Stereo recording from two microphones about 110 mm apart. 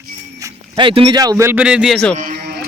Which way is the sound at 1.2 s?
35° right (ahead or behind).